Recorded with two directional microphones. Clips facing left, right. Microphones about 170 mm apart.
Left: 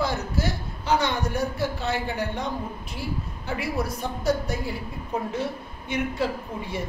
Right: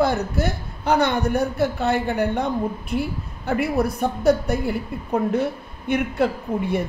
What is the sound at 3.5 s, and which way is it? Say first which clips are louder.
A woman's voice: right 7 dB; 60° right (ahead or behind).